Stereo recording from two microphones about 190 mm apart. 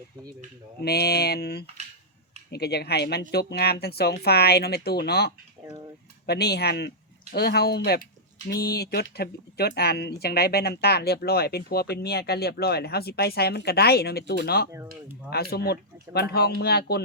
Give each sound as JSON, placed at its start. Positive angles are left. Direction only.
{"t": 0.8, "sound": "speech", "side_deg": 55}